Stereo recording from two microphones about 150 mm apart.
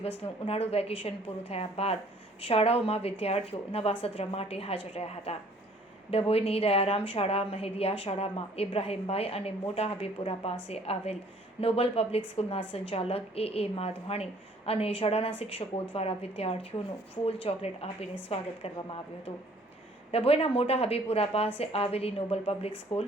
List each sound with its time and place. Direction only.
0.4 s a woman's voice: 40° left (ahead or behind)
20.1 s a woman's voice: 40° left (ahead or behind)